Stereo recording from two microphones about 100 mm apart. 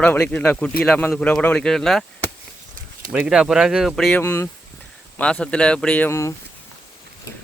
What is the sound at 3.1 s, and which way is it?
Speech, 10° right (ahead or behind).